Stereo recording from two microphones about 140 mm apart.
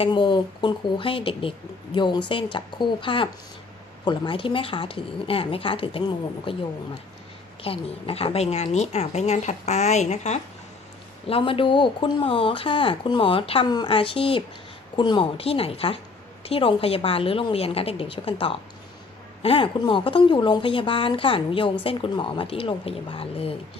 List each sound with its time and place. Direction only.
0.0 s speech: 35° left (ahead or behind); by 10.4 s 55° left (ahead or behind)
11.3 s speech: 40° left (ahead or behind)